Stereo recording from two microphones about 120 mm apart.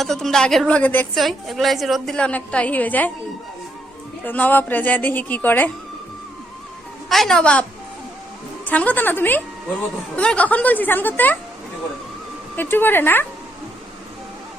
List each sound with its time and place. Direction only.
0.0 s a woman's voice: centre (ahead or behind)
0.8 s speech: 15° left (ahead or behind)
1.1 s a woman's voice: centre (ahead or behind)
4.2 s speech: 15° left (ahead or behind)
7.1 s a woman's voice: centre (ahead or behind)
8.6 s speech: 10° left (ahead or behind)
12.5 s speech: 15° left (ahead or behind)